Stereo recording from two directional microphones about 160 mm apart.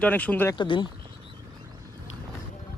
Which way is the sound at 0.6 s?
30° left (ahead or behind).